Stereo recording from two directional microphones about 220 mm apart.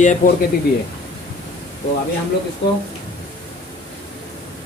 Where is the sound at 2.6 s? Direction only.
50° left (ahead or behind).